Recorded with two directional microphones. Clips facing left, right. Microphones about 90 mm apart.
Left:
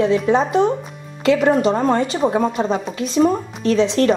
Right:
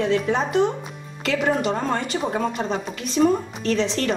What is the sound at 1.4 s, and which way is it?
Speech, 35° left (ahead or behind).